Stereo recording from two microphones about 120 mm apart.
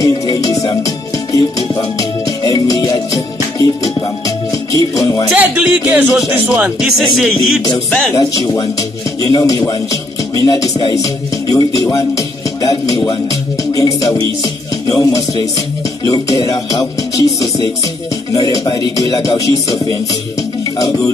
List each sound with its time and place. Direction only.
0.0 s music: 30° left (ahead or behind)
5.3 s speech: 15° right (ahead or behind)
7.2 s music: centre (ahead or behind)
8.2 s music: 30° left (ahead or behind)
9.2 s speech: 30° left (ahead or behind)
10.3 s music: 30° left (ahead or behind)
18.3 s music: 30° left (ahead or behind)